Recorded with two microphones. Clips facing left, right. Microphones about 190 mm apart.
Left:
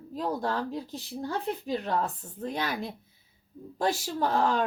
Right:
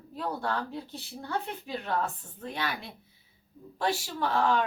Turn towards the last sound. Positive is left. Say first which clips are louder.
# left 1 dB
turn(degrees=40)  # may be behind; listen again after turning